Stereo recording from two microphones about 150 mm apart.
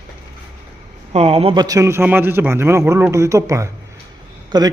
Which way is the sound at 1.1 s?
40° right (ahead or behind).